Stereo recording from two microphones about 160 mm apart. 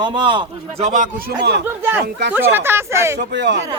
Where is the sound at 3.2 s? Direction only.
90° right.